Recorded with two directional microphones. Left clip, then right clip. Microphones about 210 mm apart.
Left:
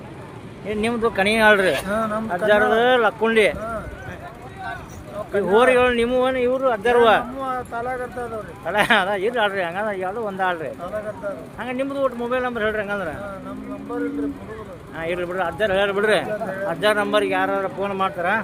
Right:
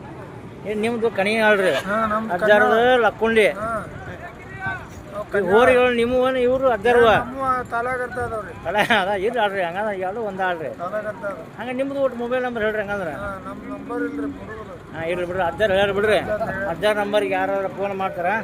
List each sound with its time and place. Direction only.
0.7 s speech: 5° left (ahead or behind)
2.5 s speech: centre (ahead or behind)
5.3 s speech: centre (ahead or behind)
14.9 s speech: centre (ahead or behind)